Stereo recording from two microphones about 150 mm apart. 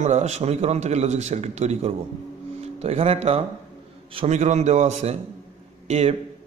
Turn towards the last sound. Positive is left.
turn(degrees=-45)  # may be behind; listen again after turning